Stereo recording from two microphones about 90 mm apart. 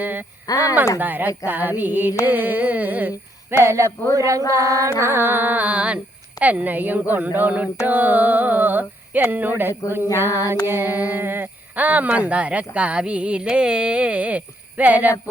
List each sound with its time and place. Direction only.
0.0 s speech: 20° right (ahead or behind)
0.4 s speech: 40° left (ahead or behind)
0.9 s speech: 20° right (ahead or behind)
3.6 s a sound: 30° right (ahead or behind)
4.5 s speech: 35° right (ahead or behind)
10.7 s a sound: 25° right (ahead or behind)